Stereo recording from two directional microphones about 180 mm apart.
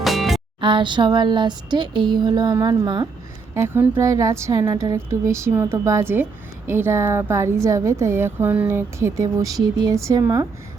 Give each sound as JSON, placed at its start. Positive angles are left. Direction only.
{"t": 0.0, "sound": "music", "side_deg": 0}
{"t": 0.6, "sound": "a sound", "side_deg": -25}
{"t": 3.5, "sound": "speech", "side_deg": -15}